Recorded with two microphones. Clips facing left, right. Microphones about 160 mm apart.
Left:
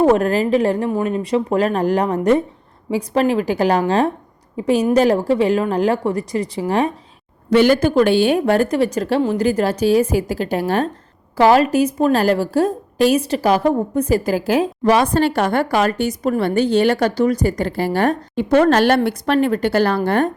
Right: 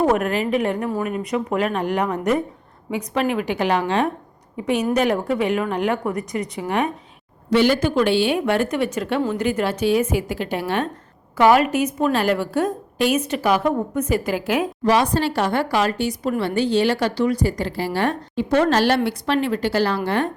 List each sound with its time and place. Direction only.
0.0 s a woman's voice: 30° left (ahead or behind)
7.5 s a woman's voice: 50° left (ahead or behind)
14.8 s speech: 55° left (ahead or behind)